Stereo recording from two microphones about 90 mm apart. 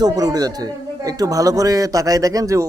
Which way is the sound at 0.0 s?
45° right (ahead or behind).